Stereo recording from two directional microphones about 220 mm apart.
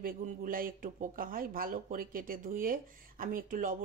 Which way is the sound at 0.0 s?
40° right (ahead or behind).